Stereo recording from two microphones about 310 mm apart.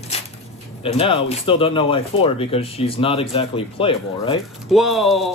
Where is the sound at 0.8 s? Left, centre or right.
Centre.